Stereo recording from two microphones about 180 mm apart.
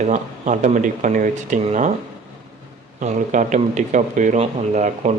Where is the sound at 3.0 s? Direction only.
45° right (ahead or behind).